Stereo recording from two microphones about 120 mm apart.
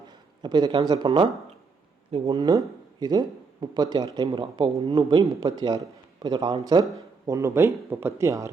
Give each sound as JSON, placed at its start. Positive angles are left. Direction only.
{"t": 0.1, "sound": "speech", "side_deg": -35}
{"t": 7.3, "sound": "speech", "side_deg": -25}